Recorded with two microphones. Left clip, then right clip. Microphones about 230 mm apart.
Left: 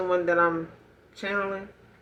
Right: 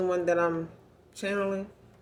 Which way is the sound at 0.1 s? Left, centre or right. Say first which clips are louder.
Left 7 dB; right.